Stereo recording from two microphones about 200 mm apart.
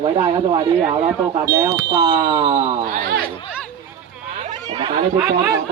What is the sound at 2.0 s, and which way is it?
Speech, 25° right (ahead or behind).